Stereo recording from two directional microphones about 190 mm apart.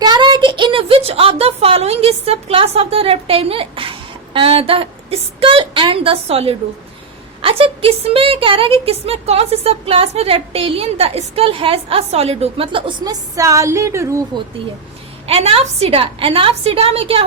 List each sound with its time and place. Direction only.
0.0 s speech: 20° right (ahead or behind)
15.3 s a woman's voice: 30° right (ahead or behind)